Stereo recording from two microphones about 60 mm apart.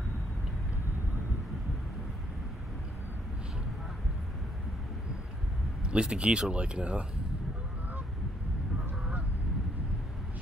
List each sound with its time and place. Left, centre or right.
5.9 s speech: centre